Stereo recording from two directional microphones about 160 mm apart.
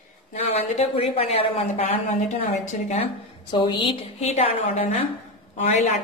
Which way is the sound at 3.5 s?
30° left (ahead or behind).